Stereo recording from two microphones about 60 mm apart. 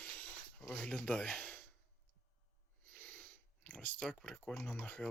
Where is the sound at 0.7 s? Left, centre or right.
Centre.